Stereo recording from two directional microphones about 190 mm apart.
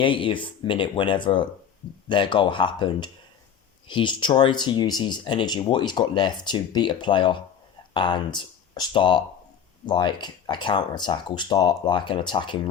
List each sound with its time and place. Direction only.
0.0 s speech: 25° left (ahead or behind)